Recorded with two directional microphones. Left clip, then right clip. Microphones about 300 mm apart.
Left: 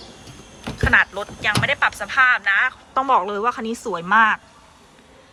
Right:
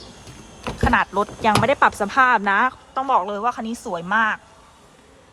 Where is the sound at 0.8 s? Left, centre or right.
Centre.